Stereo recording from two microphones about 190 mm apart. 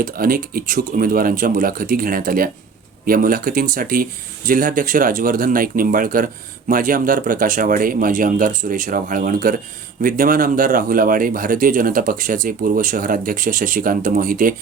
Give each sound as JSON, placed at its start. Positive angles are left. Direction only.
{"t": 0.0, "sound": "speech", "side_deg": -50}